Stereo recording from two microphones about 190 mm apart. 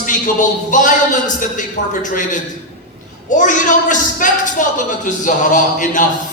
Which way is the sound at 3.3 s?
40° left (ahead or behind).